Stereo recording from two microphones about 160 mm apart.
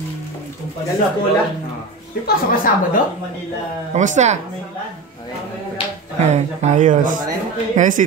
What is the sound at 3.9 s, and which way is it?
Speech, 50° right (ahead or behind).